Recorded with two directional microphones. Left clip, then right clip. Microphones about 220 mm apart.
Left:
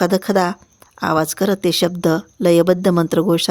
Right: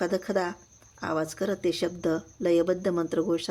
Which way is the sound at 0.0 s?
50° left (ahead or behind).